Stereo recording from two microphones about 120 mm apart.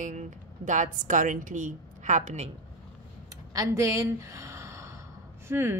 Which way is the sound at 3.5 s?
25° right (ahead or behind).